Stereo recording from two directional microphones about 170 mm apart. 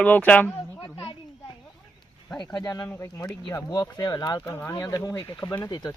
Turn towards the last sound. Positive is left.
turn(degrees=25)  # may be behind; listen again after turning